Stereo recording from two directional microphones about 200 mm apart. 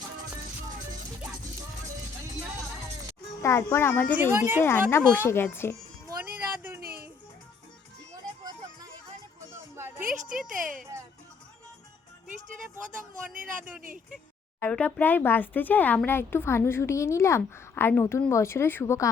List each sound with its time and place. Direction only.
3.4 s speech: 15° left (ahead or behind)
4.1 s a woman's voice: 10° right (ahead or behind)
4.6 s speech: 10° left (ahead or behind)
6.7 s music: 50° right (ahead or behind)
9.7 s a sound: 10° right (ahead or behind)
10.4 s a sound: 40° right (ahead or behind)
14.6 s speech: 5° left (ahead or behind)